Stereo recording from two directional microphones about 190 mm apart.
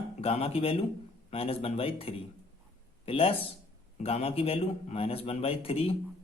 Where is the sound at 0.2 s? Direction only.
30° left (ahead or behind).